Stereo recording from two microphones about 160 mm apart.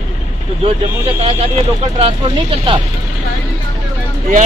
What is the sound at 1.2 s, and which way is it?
Speech, 35° right (ahead or behind).